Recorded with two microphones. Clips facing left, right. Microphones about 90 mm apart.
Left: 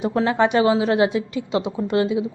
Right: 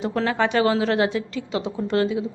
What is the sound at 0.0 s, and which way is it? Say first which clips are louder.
A woman's voice: left 3 dB; 20° left (ahead or behind).